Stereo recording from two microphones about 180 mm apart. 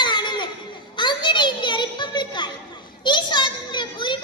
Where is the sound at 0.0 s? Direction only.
25° left (ahead or behind).